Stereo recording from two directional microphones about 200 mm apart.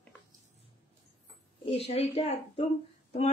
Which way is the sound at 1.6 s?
30° left (ahead or behind).